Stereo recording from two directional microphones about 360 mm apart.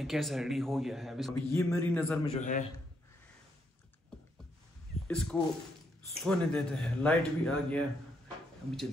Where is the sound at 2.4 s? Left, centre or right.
Left.